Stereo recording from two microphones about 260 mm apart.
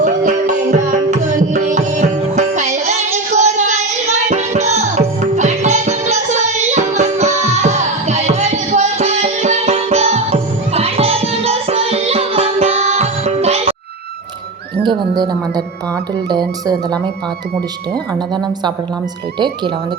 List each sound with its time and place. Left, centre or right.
0.0 s music: right
14.8 s music: centre
16.3 s speech: centre
18.1 s speech: centre